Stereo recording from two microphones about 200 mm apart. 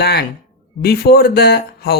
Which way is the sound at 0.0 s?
55° left (ahead or behind).